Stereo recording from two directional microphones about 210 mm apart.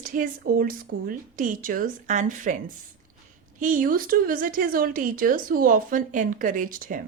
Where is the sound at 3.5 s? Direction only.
40° right (ahead or behind).